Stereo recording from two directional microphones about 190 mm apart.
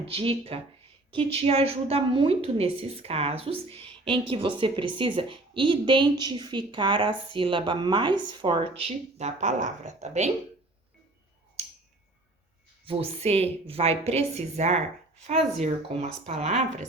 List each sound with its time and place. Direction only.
0.0 s a woman's voice: 30° right (ahead or behind)
12.8 s a woman's voice: 30° right (ahead or behind)